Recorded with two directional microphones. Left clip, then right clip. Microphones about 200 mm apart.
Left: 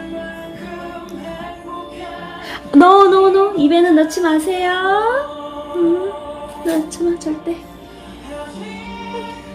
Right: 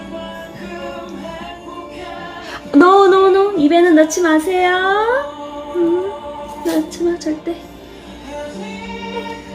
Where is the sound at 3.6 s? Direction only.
15° left (ahead or behind).